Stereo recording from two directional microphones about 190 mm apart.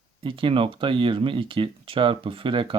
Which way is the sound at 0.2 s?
25° right (ahead or behind).